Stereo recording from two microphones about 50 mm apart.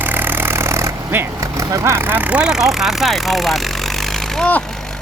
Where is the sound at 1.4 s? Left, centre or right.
Right.